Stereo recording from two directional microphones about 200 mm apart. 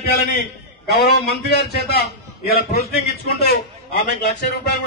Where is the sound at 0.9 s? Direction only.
55° left (ahead or behind).